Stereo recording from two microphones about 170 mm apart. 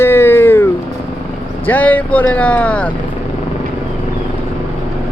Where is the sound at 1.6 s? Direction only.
10° left (ahead or behind).